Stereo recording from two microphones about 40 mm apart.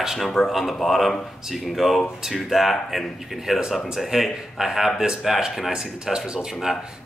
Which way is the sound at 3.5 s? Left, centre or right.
Centre.